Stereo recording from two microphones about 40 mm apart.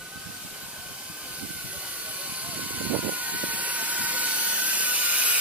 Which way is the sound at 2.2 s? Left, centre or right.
Right.